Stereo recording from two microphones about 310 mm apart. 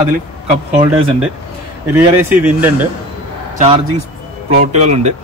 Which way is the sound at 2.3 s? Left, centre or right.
Centre.